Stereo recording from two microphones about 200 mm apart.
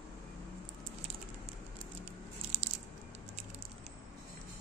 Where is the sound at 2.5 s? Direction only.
30° right (ahead or behind).